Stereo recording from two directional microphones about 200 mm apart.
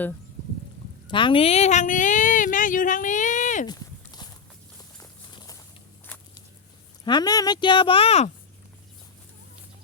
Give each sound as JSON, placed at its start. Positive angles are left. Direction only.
{"t": 1.0, "sound": "speech", "side_deg": 25}
{"t": 3.7, "sound": "walk", "side_deg": 20}
{"t": 4.9, "sound": "clip-clop", "side_deg": 20}
{"t": 7.0, "sound": "speech", "side_deg": 20}